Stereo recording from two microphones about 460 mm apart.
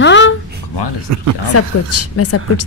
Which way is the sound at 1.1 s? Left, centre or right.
Right.